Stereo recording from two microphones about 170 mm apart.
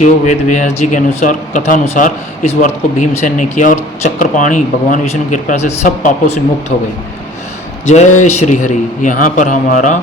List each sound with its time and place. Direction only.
0.0 s speech: 45° left (ahead or behind)
7.9 s speech: 45° left (ahead or behind)